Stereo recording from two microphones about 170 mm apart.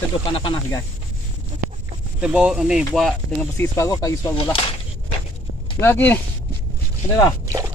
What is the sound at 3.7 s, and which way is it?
Speech, 20° left (ahead or behind).